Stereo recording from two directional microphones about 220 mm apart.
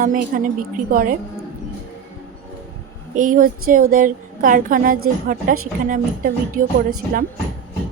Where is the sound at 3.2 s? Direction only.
40° right (ahead or behind).